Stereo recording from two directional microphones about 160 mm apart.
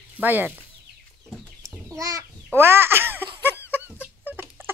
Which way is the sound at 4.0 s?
10° right (ahead or behind).